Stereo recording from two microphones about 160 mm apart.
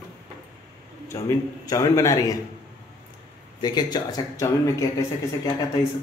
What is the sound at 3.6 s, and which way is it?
A man's voice, 25° left (ahead or behind).